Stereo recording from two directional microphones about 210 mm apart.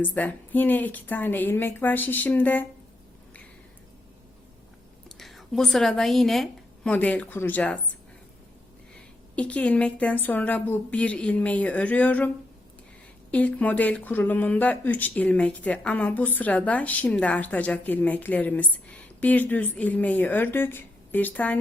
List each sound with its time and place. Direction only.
0.0 s speech: 5° left (ahead or behind)
5.0 s a woman's voice: centre (ahead or behind)
9.3 s speech: 5° left (ahead or behind)
13.3 s speech: 5° left (ahead or behind)